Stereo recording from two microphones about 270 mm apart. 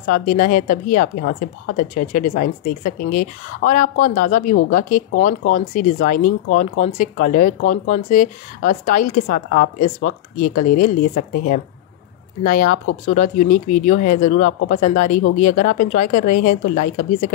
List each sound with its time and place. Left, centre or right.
0.1 s a woman's voice: left